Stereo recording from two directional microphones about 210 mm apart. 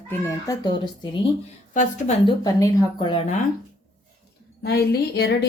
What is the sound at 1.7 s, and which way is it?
Speech, 35° left (ahead or behind).